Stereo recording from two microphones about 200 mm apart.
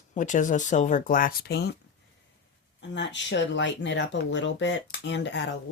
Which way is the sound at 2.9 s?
60° left (ahead or behind).